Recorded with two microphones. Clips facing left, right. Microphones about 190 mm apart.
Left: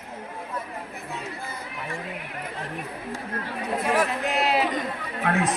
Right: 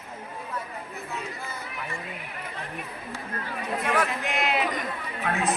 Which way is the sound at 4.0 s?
35° left (ahead or behind).